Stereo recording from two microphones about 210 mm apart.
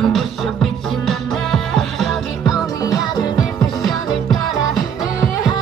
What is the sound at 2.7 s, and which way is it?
Music, 20° left (ahead or behind).